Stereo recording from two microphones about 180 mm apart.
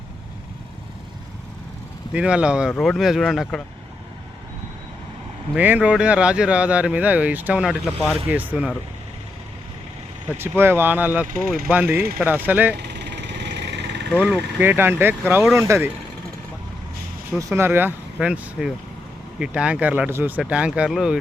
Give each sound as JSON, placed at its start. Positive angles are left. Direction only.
{"t": 2.1, "sound": "speech", "side_deg": -5}
{"t": 5.5, "sound": "speech", "side_deg": -10}
{"t": 10.3, "sound": "speech", "side_deg": -10}
{"t": 11.3, "sound": "speech", "side_deg": -55}
{"t": 11.7, "sound": "speech", "side_deg": -10}
{"t": 12.7, "sound": "vehicle", "side_deg": -70}
{"t": 14.1, "sound": "speech", "side_deg": -5}
{"t": 17.3, "sound": "speech", "side_deg": -15}